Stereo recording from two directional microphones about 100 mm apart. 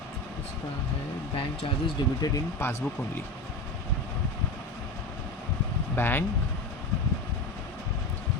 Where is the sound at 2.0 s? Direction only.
50° left (ahead or behind).